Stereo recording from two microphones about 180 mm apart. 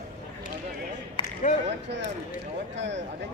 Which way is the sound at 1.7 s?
75° right (ahead or behind).